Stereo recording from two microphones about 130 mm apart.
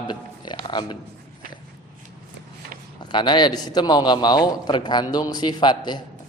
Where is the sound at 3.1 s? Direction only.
35° left (ahead or behind).